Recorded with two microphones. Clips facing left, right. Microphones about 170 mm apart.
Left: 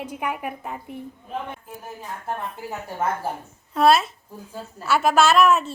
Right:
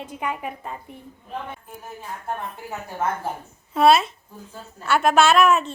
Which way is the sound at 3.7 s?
Centre (ahead or behind).